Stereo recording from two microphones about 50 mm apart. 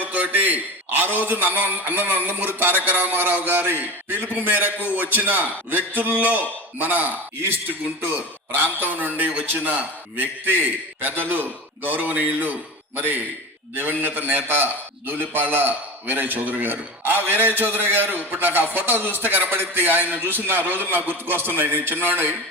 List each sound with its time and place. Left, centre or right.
0.0 s a man's voice: right
4.9 s a man's voice: right
8.5 s a man's voice: right
13.7 s a man's voice: right